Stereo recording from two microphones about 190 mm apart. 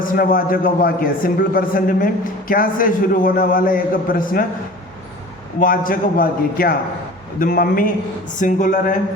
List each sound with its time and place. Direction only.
0.0 s a man's voice: 45° left (ahead or behind)
5.5 s a man's voice: 45° left (ahead or behind)